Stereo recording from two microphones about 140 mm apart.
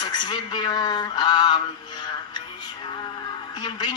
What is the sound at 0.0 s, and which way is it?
A man's voice, 30° left (ahead or behind).